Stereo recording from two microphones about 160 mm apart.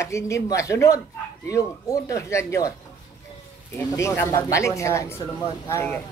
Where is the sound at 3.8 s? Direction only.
15° left (ahead or behind).